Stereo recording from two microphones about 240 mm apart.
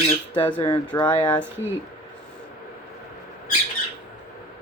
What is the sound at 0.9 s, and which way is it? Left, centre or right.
Speech, left.